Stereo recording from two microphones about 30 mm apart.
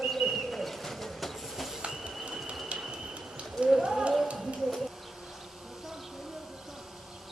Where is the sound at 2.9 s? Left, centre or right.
Right.